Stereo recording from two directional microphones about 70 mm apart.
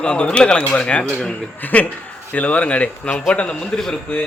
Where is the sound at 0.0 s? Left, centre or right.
Centre.